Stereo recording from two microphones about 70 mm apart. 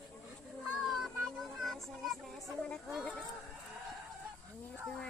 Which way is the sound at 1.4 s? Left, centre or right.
Centre.